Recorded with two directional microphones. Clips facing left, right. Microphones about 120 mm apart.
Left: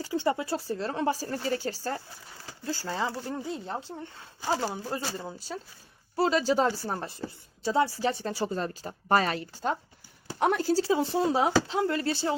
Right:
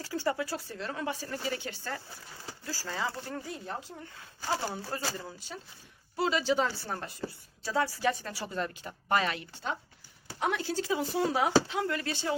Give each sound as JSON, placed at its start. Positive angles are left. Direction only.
{"t": 0.0, "sound": "speech", "side_deg": 20}
{"t": 2.6, "sound": "speech", "side_deg": 25}
{"t": 4.4, "sound": "speech", "side_deg": 20}
{"t": 5.2, "sound": "speech", "side_deg": 35}